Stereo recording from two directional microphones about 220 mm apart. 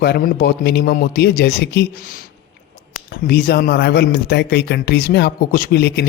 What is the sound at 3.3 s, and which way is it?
Speech, 45° left (ahead or behind).